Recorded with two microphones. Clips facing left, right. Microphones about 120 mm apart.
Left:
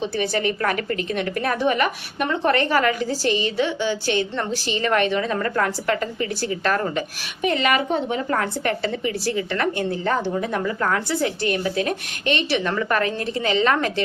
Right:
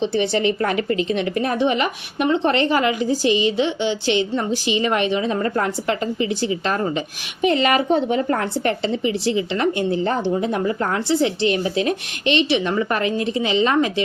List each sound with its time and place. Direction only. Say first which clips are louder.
0.0 s a woman's voice: right 4 dB; 25° right (ahead or behind)
7.4 s a woman's voice: right 3 dB; 30° right (ahead or behind)